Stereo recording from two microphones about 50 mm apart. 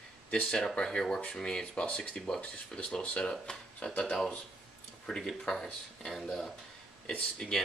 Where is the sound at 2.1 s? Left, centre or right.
Centre.